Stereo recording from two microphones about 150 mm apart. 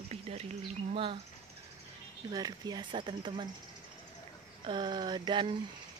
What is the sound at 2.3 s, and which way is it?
Speech, 25° right (ahead or behind).